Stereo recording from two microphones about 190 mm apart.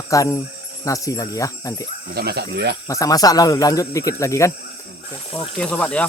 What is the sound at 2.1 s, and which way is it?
Speech, 60° right (ahead or behind).